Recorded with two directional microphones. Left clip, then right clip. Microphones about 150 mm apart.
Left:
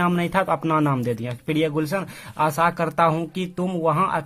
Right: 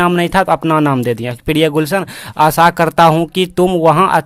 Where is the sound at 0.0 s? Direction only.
45° right (ahead or behind).